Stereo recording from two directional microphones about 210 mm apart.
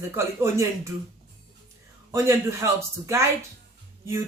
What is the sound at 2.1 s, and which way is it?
A man's voice, 15° right (ahead or behind).